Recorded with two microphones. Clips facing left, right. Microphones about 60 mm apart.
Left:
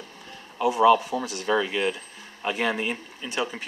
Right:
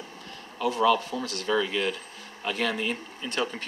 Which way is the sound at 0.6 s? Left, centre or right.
Centre.